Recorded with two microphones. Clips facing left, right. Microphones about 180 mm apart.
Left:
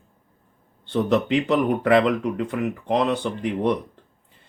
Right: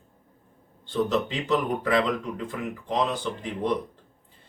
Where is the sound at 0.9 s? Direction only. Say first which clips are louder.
Left 5 dB; 65° left (ahead or behind).